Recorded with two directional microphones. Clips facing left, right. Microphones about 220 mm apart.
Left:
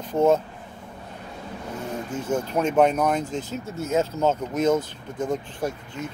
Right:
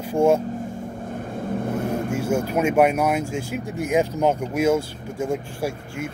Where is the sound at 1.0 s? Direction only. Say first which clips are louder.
Right 10 dB; 50° right (ahead or behind).